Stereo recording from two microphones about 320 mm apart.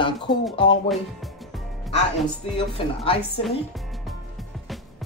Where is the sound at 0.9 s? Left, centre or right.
Centre.